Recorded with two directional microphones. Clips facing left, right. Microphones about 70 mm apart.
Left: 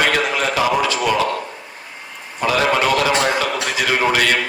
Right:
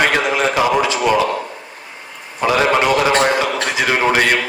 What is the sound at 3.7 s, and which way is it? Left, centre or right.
Speech, right.